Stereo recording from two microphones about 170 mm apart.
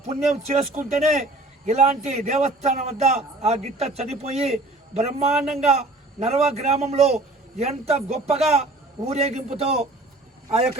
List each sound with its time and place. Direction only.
0.0 s a man's voice: 40° right (ahead or behind)